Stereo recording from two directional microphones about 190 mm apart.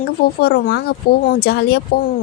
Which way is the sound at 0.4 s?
55° left (ahead or behind).